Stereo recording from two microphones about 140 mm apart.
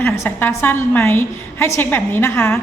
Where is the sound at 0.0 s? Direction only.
15° left (ahead or behind).